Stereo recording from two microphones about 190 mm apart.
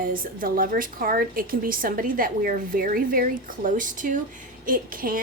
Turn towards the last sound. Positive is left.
turn(degrees=-50)  # may be behind; listen again after turning